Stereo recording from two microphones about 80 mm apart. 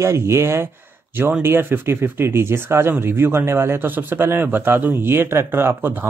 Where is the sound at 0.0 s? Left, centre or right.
Right.